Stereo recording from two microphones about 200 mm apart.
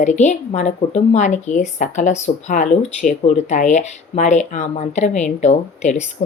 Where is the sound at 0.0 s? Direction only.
35° left (ahead or behind).